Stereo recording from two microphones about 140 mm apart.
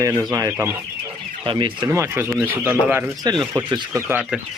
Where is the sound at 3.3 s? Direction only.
30° right (ahead or behind).